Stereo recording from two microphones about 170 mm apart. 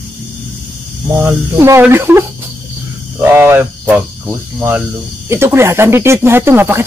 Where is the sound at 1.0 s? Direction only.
15° right (ahead or behind).